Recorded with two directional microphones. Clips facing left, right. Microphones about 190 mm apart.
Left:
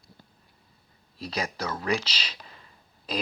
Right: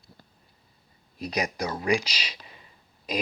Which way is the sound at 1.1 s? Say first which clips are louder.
Right 3 dB; 15° right (ahead or behind).